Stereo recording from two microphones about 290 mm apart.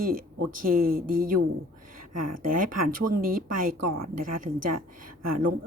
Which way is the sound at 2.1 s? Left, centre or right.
Right.